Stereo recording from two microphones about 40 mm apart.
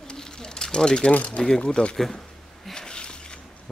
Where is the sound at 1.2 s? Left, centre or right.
Centre.